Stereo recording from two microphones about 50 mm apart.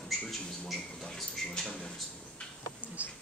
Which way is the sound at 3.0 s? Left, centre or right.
Right.